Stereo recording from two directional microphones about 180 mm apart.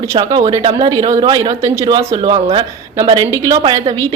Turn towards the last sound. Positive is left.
turn(degrees=-20)  # may be behind; listen again after turning